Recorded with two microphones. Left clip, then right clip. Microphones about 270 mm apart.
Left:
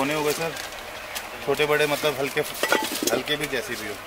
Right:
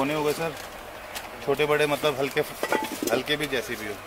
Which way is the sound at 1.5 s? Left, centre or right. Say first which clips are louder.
Left 1 dB; centre.